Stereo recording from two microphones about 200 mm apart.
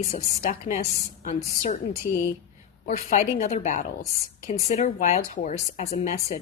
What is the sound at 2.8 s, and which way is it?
A woman's voice, 45° left (ahead or behind).